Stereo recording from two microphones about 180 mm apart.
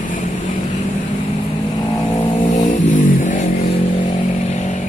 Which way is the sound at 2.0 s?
25° left (ahead or behind).